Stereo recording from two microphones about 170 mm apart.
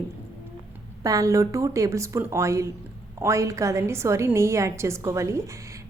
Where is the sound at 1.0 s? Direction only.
20° right (ahead or behind).